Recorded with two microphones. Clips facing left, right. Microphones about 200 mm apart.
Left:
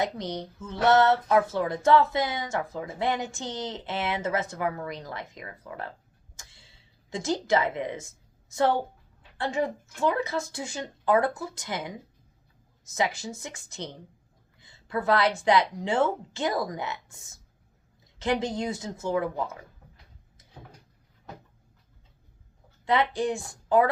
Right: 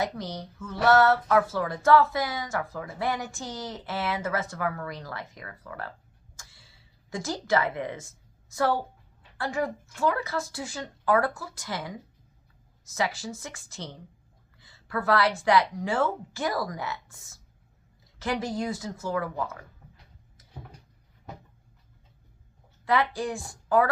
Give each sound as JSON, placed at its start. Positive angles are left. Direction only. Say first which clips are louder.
{"t": 0.0, "sound": "speech", "louder": "left 2 dB", "side_deg": 20}
{"t": 6.3, "sound": "a sound", "louder": "left 1 dB", "side_deg": 20}
{"t": 8.5, "sound": "speech", "louder": "left 2 dB", "side_deg": 20}
{"t": 14.6, "sound": "a sound", "louder": "left 1 dB", "side_deg": 20}
{"t": 15.4, "sound": "speech", "louder": "even", "side_deg": 20}
{"t": 22.9, "sound": "a woman's voice", "louder": "left 1 dB", "side_deg": 20}